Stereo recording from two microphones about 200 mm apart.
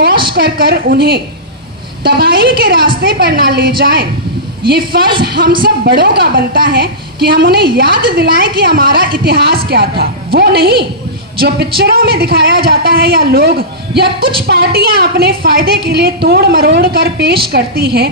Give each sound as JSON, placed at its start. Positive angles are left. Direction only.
{"t": 0.1, "sound": "a sound", "side_deg": -25}
{"t": 0.4, "sound": "speech", "side_deg": -50}
{"t": 5.2, "sound": "speech", "side_deg": -50}